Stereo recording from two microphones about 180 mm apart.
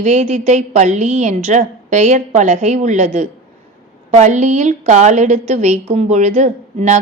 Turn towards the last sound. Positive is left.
turn(degrees=-40)  # may be behind; listen again after turning